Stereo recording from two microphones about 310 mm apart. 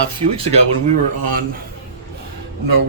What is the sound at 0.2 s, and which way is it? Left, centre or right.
Speech, centre.